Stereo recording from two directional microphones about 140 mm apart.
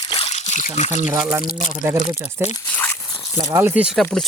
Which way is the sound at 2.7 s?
10° left (ahead or behind).